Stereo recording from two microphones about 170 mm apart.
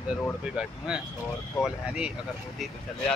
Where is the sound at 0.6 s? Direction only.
5° right (ahead or behind).